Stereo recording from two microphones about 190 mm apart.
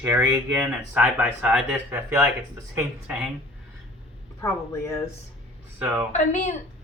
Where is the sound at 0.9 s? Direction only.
10° right (ahead or behind).